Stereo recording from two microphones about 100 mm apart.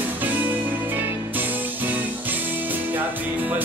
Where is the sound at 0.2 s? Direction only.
20° right (ahead or behind).